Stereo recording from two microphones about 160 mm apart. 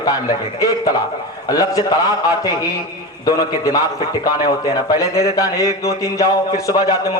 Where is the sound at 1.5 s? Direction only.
20° left (ahead or behind).